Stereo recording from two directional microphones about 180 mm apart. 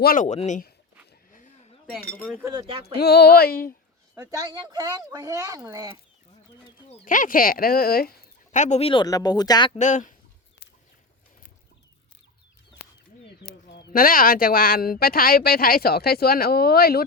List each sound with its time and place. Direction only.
0.0 s speech: 50° left (ahead or behind)
1.3 s a sound: 45° left (ahead or behind)
2.0 s speech: 55° left (ahead or behind)
2.2 s speech: 20° right (ahead or behind)
3.0 s speech: 60° left (ahead or behind)
4.1 s speech: 15° right (ahead or behind)
7.0 s speech: 50° left (ahead or behind)
8.5 s speech: 40° left (ahead or behind); by 9.7 s 25° left (ahead or behind)
9.7 s speech: 45° left (ahead or behind)
13.2 s speech: 65° left (ahead or behind)